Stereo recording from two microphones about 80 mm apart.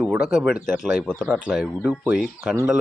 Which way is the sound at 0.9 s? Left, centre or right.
Centre.